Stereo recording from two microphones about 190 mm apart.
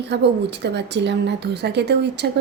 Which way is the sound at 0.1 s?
65° right (ahead or behind).